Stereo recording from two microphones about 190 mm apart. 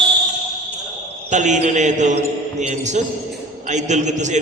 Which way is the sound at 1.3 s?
40° right (ahead or behind).